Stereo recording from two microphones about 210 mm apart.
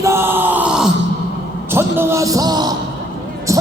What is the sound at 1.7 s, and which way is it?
Speech, 10° right (ahead or behind).